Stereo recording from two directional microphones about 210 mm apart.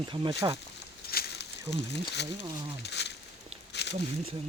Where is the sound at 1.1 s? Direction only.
50° left (ahead or behind).